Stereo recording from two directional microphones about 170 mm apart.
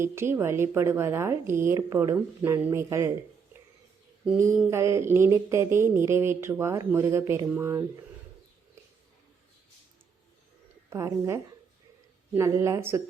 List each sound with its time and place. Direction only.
0.0 s speech: 15° right (ahead or behind)
4.7 s speech: 15° right (ahead or behind)
10.8 s speech: 15° right (ahead or behind)